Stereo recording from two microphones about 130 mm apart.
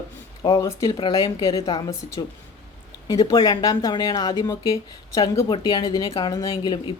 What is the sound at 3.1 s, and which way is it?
Speech, 40° left (ahead or behind).